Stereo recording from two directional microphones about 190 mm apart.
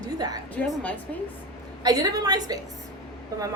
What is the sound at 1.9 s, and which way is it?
Speech, 20° right (ahead or behind).